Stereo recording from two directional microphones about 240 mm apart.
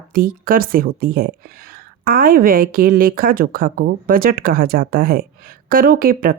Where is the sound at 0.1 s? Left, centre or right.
Right.